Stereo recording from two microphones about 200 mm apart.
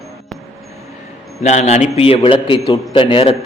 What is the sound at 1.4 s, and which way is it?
A man's voice, 35° left (ahead or behind).